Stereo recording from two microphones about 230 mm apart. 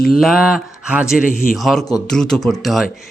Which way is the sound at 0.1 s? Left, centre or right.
Centre.